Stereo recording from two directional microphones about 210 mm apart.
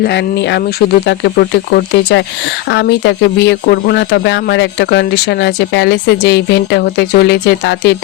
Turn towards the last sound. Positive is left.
turn(degrees=55)  # may be behind; listen again after turning